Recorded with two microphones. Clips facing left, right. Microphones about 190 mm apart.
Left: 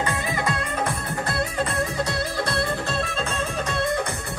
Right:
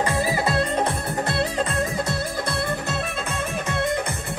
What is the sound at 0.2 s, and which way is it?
Music, 35° right (ahead or behind).